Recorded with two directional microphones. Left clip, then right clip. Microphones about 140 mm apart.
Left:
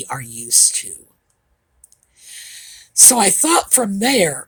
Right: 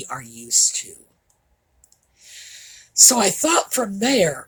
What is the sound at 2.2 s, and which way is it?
Speech, 50° left (ahead or behind).